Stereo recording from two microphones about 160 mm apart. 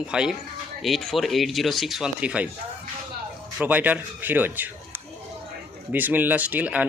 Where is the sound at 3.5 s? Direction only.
10° right (ahead or behind).